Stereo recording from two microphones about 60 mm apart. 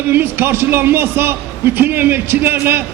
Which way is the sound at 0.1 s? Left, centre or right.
Right.